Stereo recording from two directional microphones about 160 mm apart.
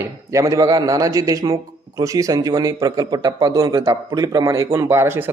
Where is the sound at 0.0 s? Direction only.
20° right (ahead or behind).